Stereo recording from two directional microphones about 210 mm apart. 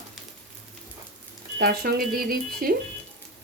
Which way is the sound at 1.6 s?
45° right (ahead or behind).